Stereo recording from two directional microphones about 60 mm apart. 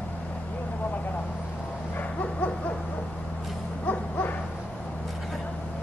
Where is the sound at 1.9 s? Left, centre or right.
Left.